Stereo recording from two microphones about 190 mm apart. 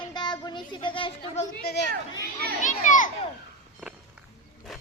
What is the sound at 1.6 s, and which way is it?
Speech, 55° left (ahead or behind).